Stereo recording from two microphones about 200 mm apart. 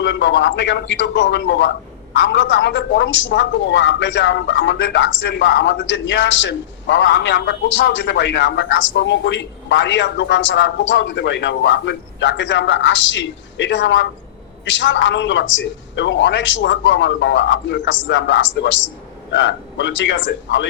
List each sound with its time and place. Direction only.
0.0 s speech: 65° left (ahead or behind)